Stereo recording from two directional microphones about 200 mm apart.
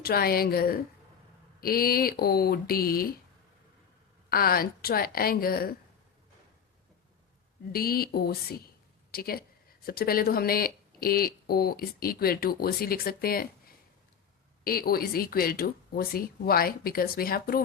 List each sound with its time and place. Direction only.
0.0 s speech: 50° left (ahead or behind)
4.3 s speech: 50° left (ahead or behind)
7.7 s speech: 50° left (ahead or behind)
14.6 s speech: 50° left (ahead or behind)